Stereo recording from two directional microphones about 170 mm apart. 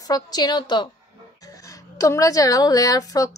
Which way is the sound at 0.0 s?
25° left (ahead or behind).